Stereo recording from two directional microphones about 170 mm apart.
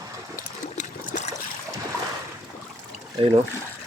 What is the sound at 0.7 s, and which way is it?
Trickle, 45° left (ahead or behind).